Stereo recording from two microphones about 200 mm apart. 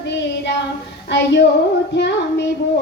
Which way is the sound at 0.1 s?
60° left (ahead or behind).